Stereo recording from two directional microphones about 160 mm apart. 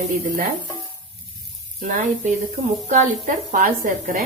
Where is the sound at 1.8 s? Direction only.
55° right (ahead or behind).